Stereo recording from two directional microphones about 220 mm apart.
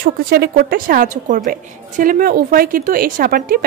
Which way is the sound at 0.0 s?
45° right (ahead or behind).